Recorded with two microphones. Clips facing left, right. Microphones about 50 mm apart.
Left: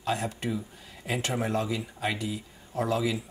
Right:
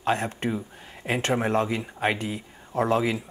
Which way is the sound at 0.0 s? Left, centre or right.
Right.